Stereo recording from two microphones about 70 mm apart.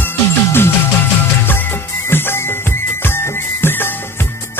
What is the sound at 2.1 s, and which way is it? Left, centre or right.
Music, left.